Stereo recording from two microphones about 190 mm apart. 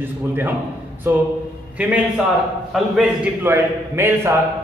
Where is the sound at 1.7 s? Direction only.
5° right (ahead or behind).